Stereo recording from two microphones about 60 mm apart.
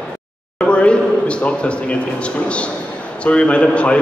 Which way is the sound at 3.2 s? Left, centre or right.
Centre.